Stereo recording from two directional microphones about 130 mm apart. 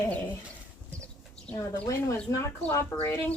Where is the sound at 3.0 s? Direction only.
15° left (ahead or behind).